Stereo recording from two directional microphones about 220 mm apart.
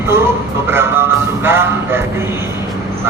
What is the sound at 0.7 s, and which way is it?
Music, 10° right (ahead or behind).